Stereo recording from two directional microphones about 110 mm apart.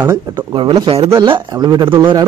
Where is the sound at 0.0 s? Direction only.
30° right (ahead or behind).